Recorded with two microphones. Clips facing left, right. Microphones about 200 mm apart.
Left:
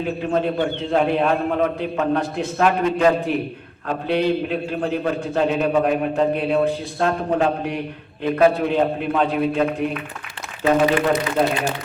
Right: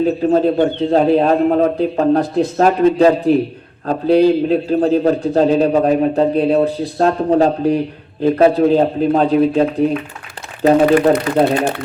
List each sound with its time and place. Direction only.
0.0 s a man's voice: 35° right (ahead or behind)